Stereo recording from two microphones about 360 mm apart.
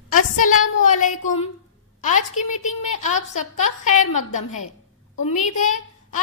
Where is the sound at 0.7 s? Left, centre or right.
Left.